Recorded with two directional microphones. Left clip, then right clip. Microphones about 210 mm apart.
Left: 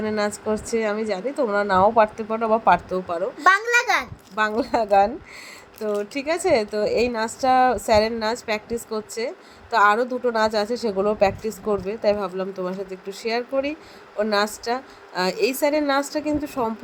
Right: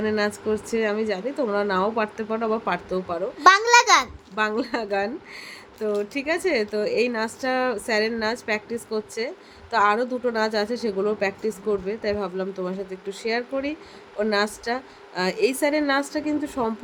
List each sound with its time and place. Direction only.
0.0 s a woman's voice: 10° left (ahead or behind)
3.4 s a child's voice: 20° right (ahead or behind)
4.4 s a woman's voice: 10° left (ahead or behind)